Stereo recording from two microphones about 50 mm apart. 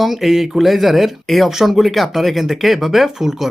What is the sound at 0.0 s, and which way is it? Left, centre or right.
Speech, centre.